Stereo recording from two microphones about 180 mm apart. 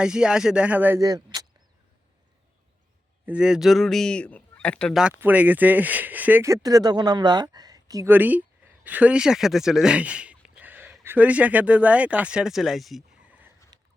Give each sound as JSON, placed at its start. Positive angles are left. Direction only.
{"t": 0.0, "sound": "speech", "side_deg": -5}
{"t": 3.2, "sound": "speech", "side_deg": -5}
{"t": 13.7, "sound": "a sound", "side_deg": -20}